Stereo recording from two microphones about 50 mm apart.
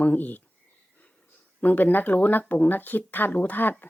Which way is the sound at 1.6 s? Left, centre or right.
Left.